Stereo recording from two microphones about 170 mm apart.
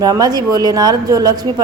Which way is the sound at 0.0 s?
20° right (ahead or behind).